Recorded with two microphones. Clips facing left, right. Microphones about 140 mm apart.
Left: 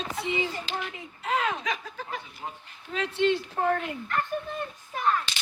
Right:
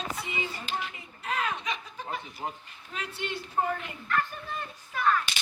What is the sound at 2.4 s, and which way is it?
Speech, 25° right (ahead or behind).